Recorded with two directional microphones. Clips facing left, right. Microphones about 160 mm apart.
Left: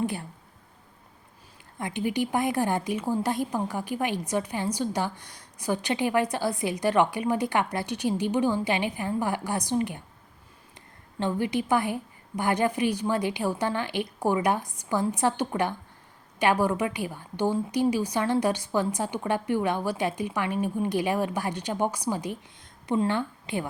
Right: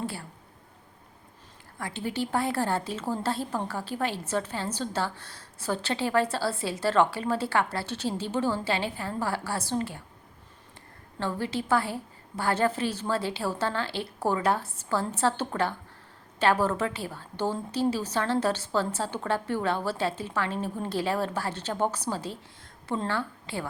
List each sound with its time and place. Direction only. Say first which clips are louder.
0.0 s speech: left 5 dB; 20° left (ahead or behind)
1.8 s a woman's voice: left 4 dB; 15° left (ahead or behind)
11.2 s a woman's voice: left 4 dB; 15° left (ahead or behind)